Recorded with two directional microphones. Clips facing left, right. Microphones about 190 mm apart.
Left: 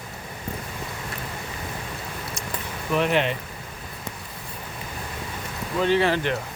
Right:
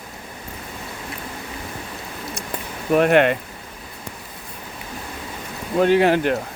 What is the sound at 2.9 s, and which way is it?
Speech, 55° right (ahead or behind).